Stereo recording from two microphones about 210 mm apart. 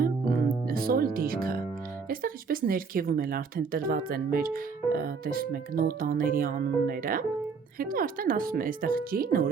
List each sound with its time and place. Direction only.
0.0 s music: 45° right (ahead or behind)
2.0 s speech: 45° right (ahead or behind)